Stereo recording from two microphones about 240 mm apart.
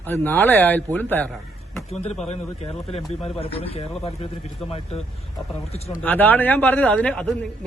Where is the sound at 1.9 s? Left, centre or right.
Left.